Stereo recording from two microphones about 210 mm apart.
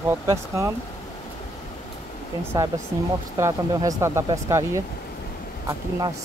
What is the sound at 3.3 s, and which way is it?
Speech, 15° right (ahead or behind).